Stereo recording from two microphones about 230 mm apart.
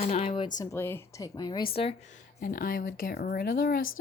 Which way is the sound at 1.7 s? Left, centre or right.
Left.